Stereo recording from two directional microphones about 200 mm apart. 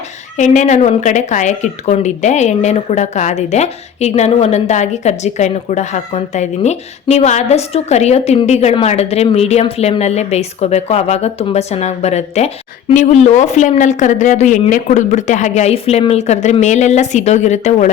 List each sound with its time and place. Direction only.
0.3 s a woman's voice: 35° left (ahead or behind)